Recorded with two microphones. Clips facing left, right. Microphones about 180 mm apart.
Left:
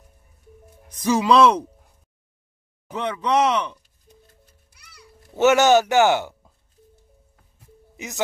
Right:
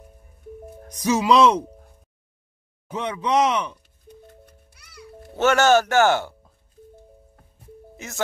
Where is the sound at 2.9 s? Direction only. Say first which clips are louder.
Left 1 dB; 10° right (ahead or behind).